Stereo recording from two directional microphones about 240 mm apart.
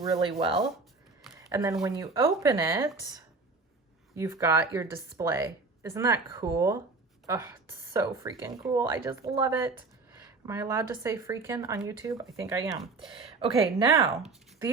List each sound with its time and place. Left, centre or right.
0.0 s speech: right
1.4 s a sound: centre
1.8 s speech: centre